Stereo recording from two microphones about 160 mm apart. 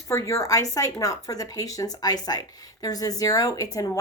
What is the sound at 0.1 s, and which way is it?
A woman's voice, 20° left (ahead or behind).